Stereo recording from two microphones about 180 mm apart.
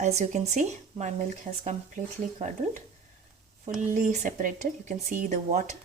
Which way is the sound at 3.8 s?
40° right (ahead or behind).